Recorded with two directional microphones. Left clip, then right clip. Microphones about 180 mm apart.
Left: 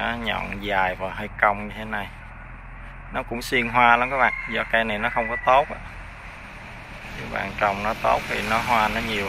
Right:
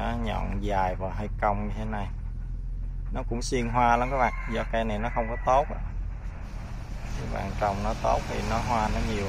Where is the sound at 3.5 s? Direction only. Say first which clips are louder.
Left 6 dB; 15° right (ahead or behind).